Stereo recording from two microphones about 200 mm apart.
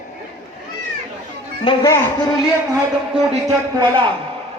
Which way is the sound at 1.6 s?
20° left (ahead or behind).